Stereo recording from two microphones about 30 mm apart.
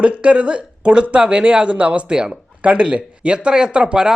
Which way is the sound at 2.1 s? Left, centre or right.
Right.